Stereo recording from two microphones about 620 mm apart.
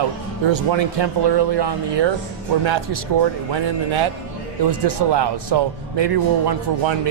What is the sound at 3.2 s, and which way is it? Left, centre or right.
Speech, right.